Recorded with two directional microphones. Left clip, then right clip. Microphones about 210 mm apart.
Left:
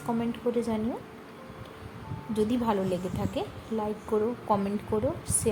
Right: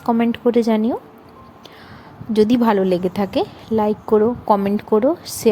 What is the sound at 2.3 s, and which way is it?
A woman's voice, 45° right (ahead or behind).